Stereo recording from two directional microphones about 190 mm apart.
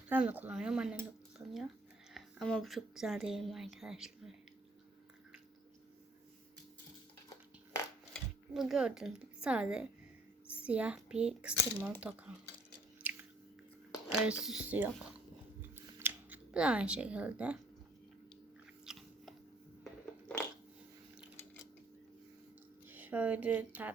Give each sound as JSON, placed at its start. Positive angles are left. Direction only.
{"t": 0.1, "sound": "speech", "side_deg": -10}
{"t": 8.1, "sound": "a child's voice", "side_deg": 0}
{"t": 13.0, "sound": "biting", "side_deg": -10}
{"t": 14.4, "sound": "speech", "side_deg": -5}
{"t": 15.7, "sound": "a sound", "side_deg": -10}
{"t": 18.9, "sound": "biting", "side_deg": 0}
{"t": 19.8, "sound": "a sound", "side_deg": 5}
{"t": 22.9, "sound": "speech", "side_deg": -10}